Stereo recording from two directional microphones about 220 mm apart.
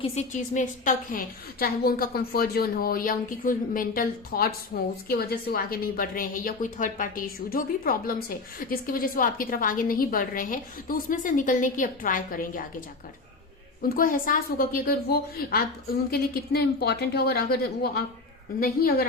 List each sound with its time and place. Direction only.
0.0 s a woman's voice: 30° left (ahead or behind)
13.9 s a woman's voice: 40° left (ahead or behind)